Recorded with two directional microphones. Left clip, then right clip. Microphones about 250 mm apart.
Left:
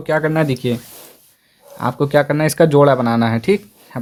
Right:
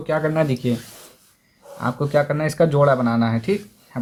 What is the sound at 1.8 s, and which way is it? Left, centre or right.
Speech, left.